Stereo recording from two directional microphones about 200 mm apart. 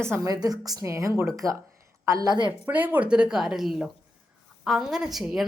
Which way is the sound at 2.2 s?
20° right (ahead or behind).